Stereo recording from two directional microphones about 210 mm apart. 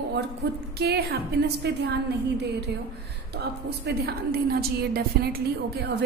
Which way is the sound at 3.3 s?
50° right (ahead or behind).